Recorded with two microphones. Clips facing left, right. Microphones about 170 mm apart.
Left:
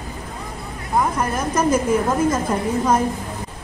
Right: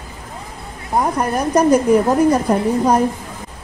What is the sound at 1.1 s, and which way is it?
A woman's voice, 35° right (ahead or behind).